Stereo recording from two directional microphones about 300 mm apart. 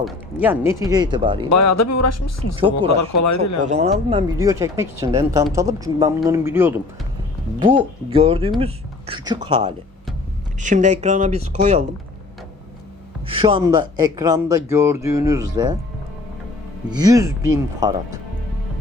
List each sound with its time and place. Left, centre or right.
0.0 s speech: centre
1.5 s speech: left
2.6 s speech: centre
2.9 s speech: left
3.6 s speech: right
13.2 s speech: centre
16.9 s speech: centre